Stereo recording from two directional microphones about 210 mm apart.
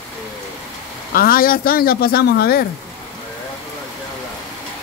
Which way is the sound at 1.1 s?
45° left (ahead or behind).